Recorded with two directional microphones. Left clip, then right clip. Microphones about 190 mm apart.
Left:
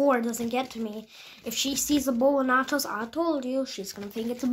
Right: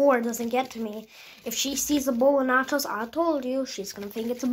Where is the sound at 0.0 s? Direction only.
30° left (ahead or behind).